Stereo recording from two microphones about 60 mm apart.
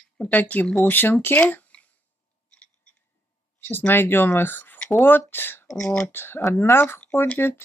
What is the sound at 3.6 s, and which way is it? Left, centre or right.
Speech, left.